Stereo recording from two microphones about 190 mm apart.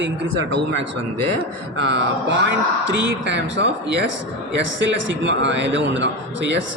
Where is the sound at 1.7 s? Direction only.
65° right (ahead or behind).